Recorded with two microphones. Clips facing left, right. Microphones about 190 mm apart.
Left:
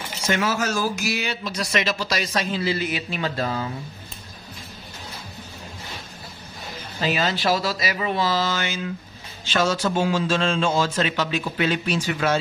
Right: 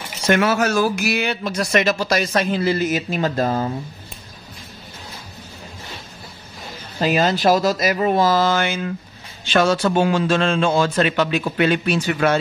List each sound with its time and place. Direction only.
0.3 s speech: 65° right (ahead or behind); by 3.7 s 45° right (ahead or behind)
7.0 s a man's voice: 45° right (ahead or behind)